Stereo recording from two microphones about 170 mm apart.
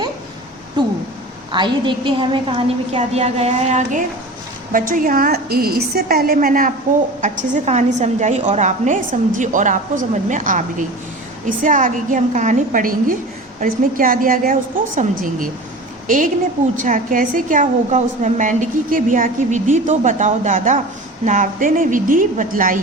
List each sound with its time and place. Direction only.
1.5 s a woman's voice: 30° right (ahead or behind)
3.0 s a woman's voice: 40° right (ahead or behind)
4.7 s a woman's voice: 55° right (ahead or behind)